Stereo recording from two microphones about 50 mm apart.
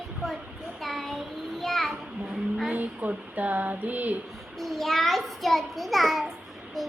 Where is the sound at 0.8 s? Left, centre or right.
Centre.